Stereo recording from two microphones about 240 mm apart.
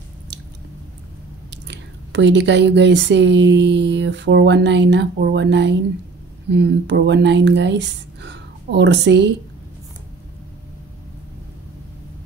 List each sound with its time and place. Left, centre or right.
1.5 s speech: right